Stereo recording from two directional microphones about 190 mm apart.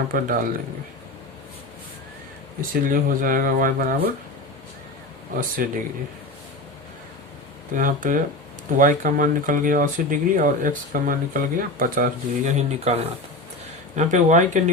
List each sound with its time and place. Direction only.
0.1 s speech: 45° right (ahead or behind)
2.6 s speech: 45° right (ahead or behind)
5.6 s speech: 50° right (ahead or behind)
7.7 s speech: 45° right (ahead or behind)